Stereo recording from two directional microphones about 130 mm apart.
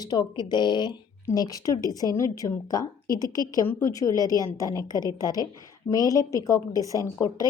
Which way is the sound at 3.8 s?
25° left (ahead or behind).